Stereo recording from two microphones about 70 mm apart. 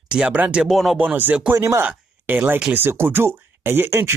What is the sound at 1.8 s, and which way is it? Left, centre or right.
Speech, right.